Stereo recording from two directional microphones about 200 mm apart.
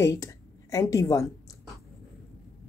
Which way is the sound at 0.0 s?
15° left (ahead or behind).